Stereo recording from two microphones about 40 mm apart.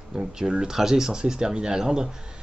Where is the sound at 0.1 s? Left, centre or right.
Centre.